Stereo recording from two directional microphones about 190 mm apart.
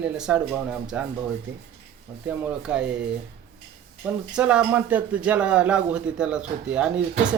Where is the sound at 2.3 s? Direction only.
5° right (ahead or behind).